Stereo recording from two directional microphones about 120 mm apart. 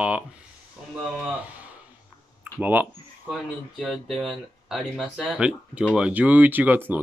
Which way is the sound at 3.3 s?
Centre (ahead or behind).